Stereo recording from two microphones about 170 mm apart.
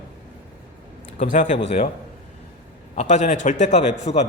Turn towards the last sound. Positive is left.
turn(degrees=35)  # may be behind; listen again after turning